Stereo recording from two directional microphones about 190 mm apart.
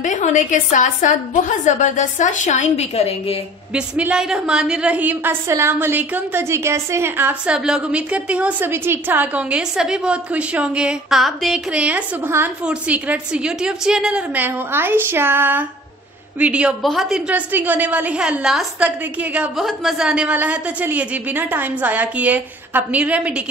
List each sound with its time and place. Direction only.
0.0 s a woman's voice: 40° left (ahead or behind)
3.7 s a woman's voice: 5° right (ahead or behind)